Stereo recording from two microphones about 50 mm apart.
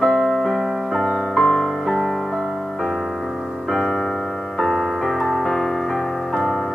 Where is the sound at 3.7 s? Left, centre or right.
Centre.